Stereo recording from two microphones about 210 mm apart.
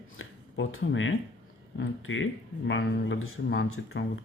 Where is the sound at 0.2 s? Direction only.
70° left (ahead or behind).